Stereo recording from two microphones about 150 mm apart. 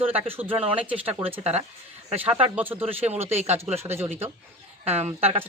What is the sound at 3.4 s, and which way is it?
Speech, 45° right (ahead or behind).